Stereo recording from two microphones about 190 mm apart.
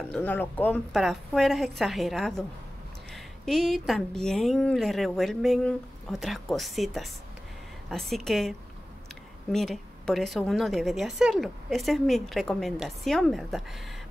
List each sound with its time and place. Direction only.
0.1 s a woman's voice: 10° left (ahead or behind)
3.4 s a woman's voice: centre (ahead or behind)